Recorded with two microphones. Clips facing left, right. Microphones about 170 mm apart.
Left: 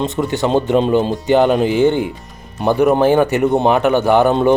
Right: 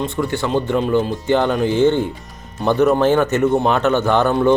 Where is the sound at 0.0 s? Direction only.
20° left (ahead or behind).